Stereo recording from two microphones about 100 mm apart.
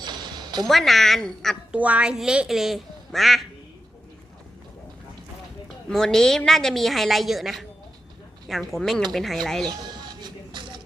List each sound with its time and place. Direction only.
0.0 s a sound: 45° right (ahead or behind)
0.7 s a woman's voice: centre (ahead or behind)
1.7 s a woman's voice: 15° right (ahead or behind)
5.9 s a woman's voice: 5° left (ahead or behind)
9.6 s music: 45° right (ahead or behind)